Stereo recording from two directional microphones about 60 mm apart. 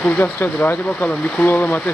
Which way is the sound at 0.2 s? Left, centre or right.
Left.